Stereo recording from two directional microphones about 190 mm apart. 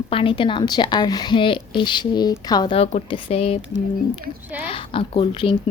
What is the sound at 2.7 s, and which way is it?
Speech, 30° left (ahead or behind).